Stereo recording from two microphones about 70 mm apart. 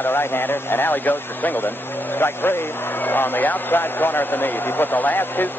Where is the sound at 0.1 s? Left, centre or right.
Left.